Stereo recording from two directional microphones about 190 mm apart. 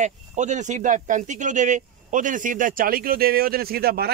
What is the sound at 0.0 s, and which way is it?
Speech, 40° right (ahead or behind).